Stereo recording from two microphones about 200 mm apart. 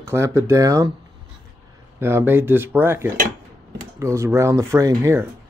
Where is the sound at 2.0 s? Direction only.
10° right (ahead or behind).